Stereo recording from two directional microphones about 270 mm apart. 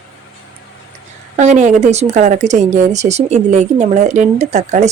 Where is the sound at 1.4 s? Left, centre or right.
Right.